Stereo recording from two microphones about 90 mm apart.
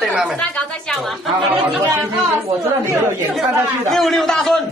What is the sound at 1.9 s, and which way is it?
Speech, 30° right (ahead or behind).